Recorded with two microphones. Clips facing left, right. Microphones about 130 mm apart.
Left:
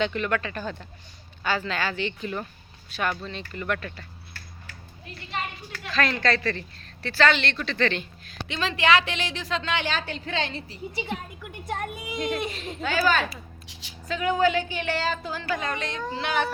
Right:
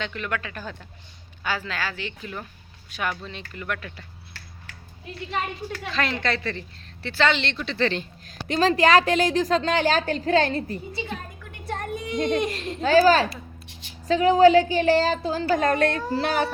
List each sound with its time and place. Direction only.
0.0 s speech: centre (ahead or behind)
5.9 s a woman's voice: 20° right (ahead or behind); by 10.8 s 50° right (ahead or behind)
11.6 s a sound: 5° left (ahead or behind)
12.8 s a woman's voice: 35° right (ahead or behind); by 16.0 s 50° right (ahead or behind)
16.0 s a woman's voice: 40° right (ahead or behind)